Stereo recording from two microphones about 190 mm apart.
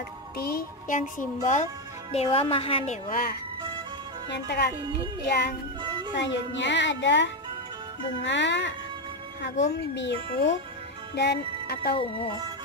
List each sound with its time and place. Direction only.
0.4 s music: 50° left (ahead or behind)
2.1 s a woman's voice: 30° left (ahead or behind); by 3.3 s 45° left (ahead or behind)
4.3 s speech: 60° left (ahead or behind)
5.8 s music: 25° right (ahead or behind)
6.1 s speech: 70° left (ahead or behind)
11.1 s music: 60° left (ahead or behind)